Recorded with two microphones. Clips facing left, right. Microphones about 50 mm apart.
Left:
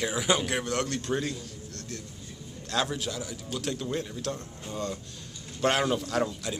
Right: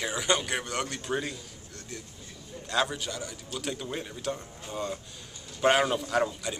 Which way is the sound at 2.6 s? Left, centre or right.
Centre.